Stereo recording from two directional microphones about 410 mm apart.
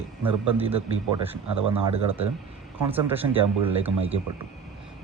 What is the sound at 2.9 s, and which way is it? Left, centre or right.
Speech, centre.